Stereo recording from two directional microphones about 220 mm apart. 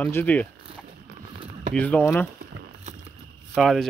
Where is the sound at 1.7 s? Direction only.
5° left (ahead or behind).